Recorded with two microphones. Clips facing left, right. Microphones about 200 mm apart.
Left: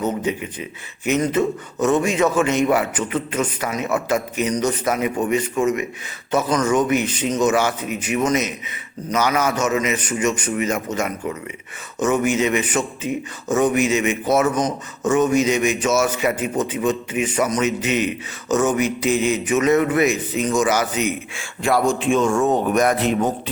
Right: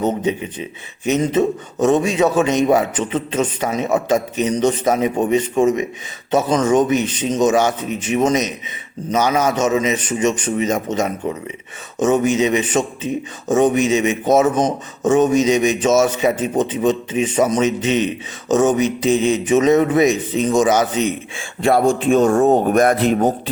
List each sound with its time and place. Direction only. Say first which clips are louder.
0.0 s a man's voice: right 3 dB; 20° right (ahead or behind)
21.8 s a man's voice: right 5 dB; 40° right (ahead or behind)
22.7 s speech: right 3 dB; 50° right (ahead or behind)
23.0 s a man's voice: right 4 dB; 35° right (ahead or behind)